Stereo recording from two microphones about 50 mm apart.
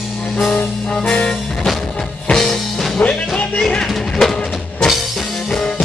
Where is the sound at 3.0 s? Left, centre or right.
Left.